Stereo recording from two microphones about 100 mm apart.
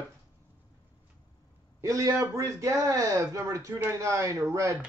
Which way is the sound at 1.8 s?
35° right (ahead or behind).